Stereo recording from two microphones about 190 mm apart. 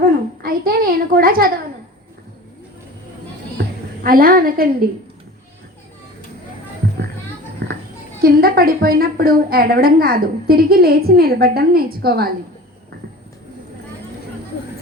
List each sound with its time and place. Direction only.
0.0 s a sound: 50° right (ahead or behind)
4.0 s a woman's voice: 50° right (ahead or behind)
8.2 s a woman's voice: 50° right (ahead or behind)